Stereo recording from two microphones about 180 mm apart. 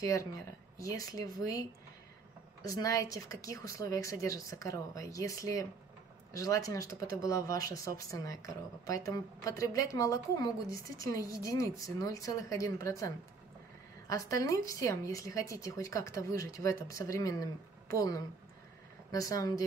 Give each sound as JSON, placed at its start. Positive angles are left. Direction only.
{"t": 0.0, "sound": "a woman's voice", "side_deg": 15}